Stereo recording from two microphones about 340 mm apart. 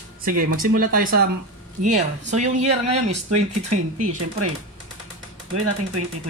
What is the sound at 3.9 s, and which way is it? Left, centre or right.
Speech, right.